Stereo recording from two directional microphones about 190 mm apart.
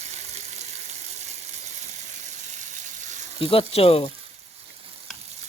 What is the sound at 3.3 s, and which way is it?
Speech, 30° left (ahead or behind).